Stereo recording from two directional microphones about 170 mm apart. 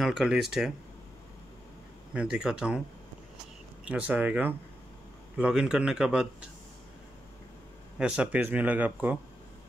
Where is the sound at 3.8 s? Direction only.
10° right (ahead or behind).